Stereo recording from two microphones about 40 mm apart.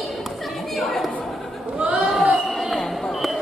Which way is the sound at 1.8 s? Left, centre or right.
Right.